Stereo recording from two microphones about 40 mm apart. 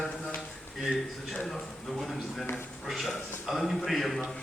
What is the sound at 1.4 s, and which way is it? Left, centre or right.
A man's voice, centre.